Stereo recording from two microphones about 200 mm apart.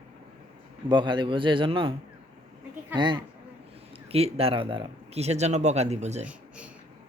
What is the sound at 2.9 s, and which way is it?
A man's voice, 25° right (ahead or behind).